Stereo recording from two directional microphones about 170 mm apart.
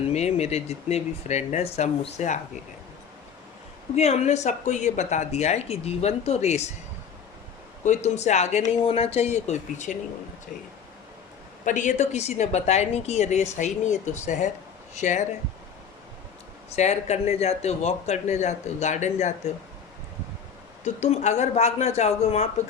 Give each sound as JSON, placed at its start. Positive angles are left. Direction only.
{"t": 0.1, "sound": "a woman's voice", "side_deg": 40}
{"t": 3.9, "sound": "a woman's voice", "side_deg": 40}
{"t": 7.9, "sound": "a woman's voice", "side_deg": 40}
{"t": 11.6, "sound": "a woman's voice", "side_deg": 45}
{"t": 16.6, "sound": "a woman's voice", "side_deg": 40}
{"t": 20.8, "sound": "a woman's voice", "side_deg": 40}